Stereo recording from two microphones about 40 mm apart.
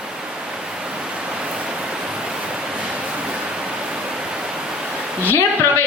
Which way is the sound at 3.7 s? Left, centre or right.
Right.